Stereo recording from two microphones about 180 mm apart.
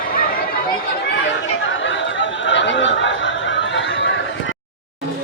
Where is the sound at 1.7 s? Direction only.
90° left.